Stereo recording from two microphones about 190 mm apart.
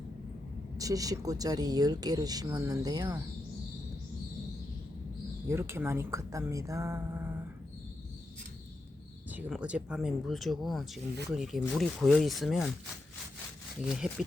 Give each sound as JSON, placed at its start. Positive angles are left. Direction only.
{"t": 0.8, "sound": "speech", "side_deg": -20}
{"t": 5.5, "sound": "speech", "side_deg": -15}
{"t": 9.3, "sound": "speech", "side_deg": -5}
{"t": 13.9, "sound": "speech", "side_deg": -5}